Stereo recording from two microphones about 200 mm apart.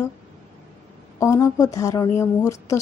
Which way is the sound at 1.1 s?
15° left (ahead or behind).